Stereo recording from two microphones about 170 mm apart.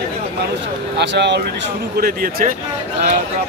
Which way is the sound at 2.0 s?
60° right (ahead or behind).